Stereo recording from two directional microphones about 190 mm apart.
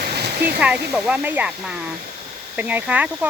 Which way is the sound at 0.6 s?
5° right (ahead or behind).